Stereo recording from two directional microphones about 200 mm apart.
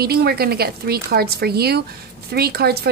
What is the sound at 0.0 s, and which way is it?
Speech, 50° right (ahead or behind).